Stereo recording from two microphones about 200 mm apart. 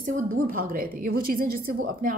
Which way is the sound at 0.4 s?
45° right (ahead or behind).